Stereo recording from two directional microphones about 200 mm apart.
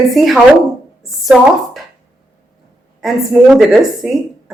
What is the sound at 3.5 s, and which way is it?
Speech, centre (ahead or behind).